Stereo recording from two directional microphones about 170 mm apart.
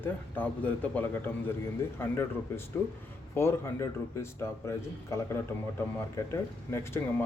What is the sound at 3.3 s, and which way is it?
A man's voice, 15° left (ahead or behind).